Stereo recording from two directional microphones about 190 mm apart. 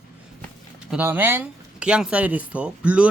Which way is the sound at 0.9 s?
10° right (ahead or behind).